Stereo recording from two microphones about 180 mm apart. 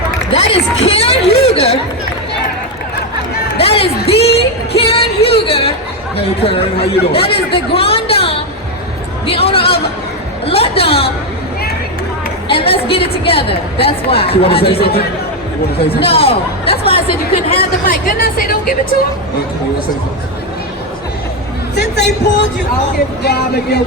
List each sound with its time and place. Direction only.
0.3 s a sound: 35° left (ahead or behind)
1.5 s chatter: 35° left (ahead or behind)
3.6 s a sound: 30° left (ahead or behind)
4.0 s music: 35° left (ahead or behind)
6.1 s speech: 30° left (ahead or behind)
9.2 s a sound: 30° left (ahead or behind)
12.5 s a woman's voice: 30° left (ahead or behind)
16.0 s a woman's voice: 30° left (ahead or behind)
17.8 s speech: 50° left (ahead or behind)
21.8 s speech: 70° left (ahead or behind)